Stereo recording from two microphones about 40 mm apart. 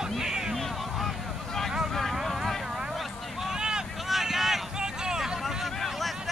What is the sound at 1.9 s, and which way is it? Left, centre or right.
Vehicle, centre.